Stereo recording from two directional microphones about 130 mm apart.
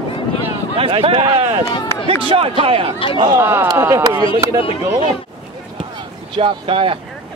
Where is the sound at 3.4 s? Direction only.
15° right (ahead or behind).